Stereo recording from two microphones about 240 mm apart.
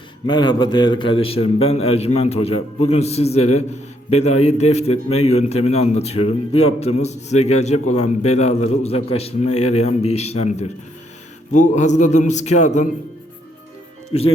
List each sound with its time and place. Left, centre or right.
0.3 s a man's voice: centre